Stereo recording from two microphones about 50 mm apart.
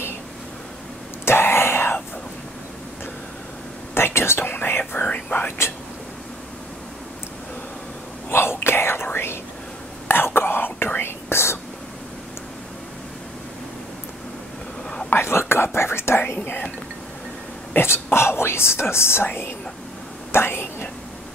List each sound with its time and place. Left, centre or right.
1.2 s whispering: left
3.9 s whispering: left
5.0 s whispering: left
8.3 s whispering: left
15.0 s whispering: left
17.7 s speech: left
20.2 s a sound: left